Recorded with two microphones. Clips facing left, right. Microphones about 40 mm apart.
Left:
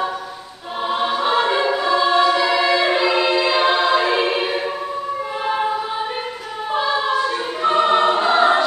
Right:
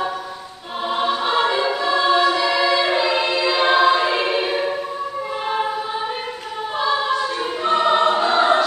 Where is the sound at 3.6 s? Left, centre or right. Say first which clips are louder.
Right 1 dB; centre.